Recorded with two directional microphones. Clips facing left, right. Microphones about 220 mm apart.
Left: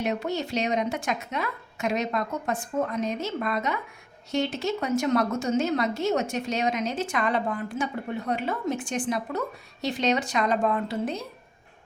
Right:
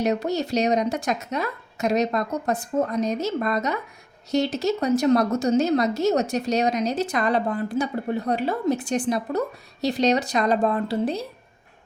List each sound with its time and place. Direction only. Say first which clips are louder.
0.0 s a woman's voice: right 5 dB; 40° right (ahead or behind)